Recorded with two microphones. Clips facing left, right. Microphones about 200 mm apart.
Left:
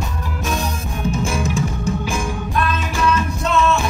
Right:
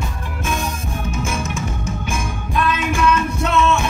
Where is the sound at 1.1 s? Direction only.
35° left (ahead or behind).